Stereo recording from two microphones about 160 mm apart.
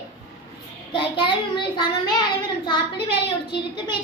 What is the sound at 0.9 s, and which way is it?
A child's voice, 30° left (ahead or behind).